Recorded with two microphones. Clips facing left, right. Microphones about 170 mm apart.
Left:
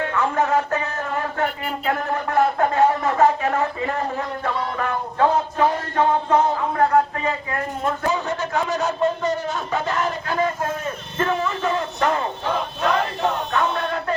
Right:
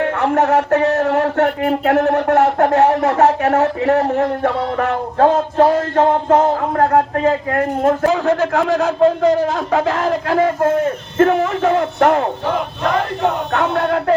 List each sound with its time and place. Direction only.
0.0 s speech: 65° right (ahead or behind)
6.0 s a sound: 50° right (ahead or behind)
6.5 s speech: 50° right (ahead or behind); by 12.3 s 65° right (ahead or behind)
13.5 s speech: 65° right (ahead or behind)